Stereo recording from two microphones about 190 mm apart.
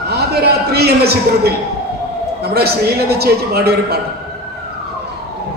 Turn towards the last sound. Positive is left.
turn(degrees=-55)  # may be behind; listen again after turning